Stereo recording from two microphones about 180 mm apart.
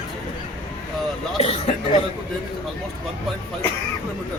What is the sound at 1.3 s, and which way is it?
Speech, 35° left (ahead or behind).